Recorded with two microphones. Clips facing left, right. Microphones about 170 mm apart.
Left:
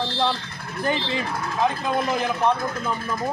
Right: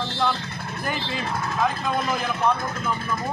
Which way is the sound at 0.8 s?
25° left (ahead or behind).